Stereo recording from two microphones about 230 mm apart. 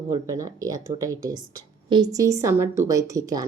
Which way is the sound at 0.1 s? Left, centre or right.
Centre.